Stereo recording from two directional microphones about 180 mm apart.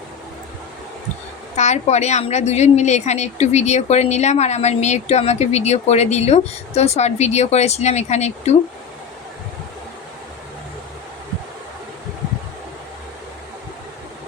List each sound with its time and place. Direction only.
1.5 s a woman's voice: 40° left (ahead or behind)